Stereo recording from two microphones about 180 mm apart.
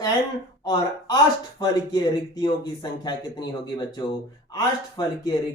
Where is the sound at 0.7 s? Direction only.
25° left (ahead or behind).